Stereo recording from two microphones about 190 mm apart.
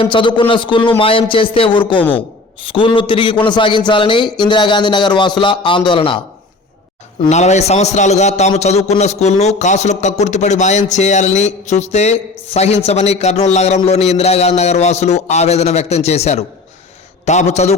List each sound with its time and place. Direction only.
0.0 s a man's voice: 25° left (ahead or behind)
7.3 s a man's voice: 35° left (ahead or behind)